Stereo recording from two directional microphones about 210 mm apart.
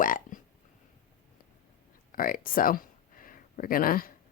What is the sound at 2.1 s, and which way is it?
A woman's voice, 40° left (ahead or behind).